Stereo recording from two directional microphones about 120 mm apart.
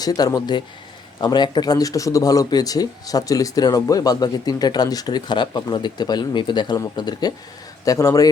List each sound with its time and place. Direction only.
0.0 s a man's voice: 30° left (ahead or behind)